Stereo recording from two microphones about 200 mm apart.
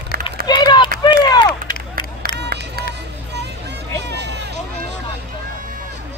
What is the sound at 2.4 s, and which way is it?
Run, 55° right (ahead or behind).